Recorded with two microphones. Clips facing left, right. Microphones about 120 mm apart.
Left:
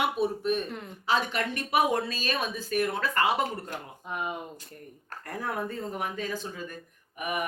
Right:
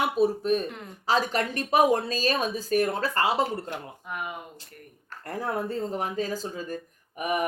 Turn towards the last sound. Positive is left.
turn(degrees=-35)  # may be behind; listen again after turning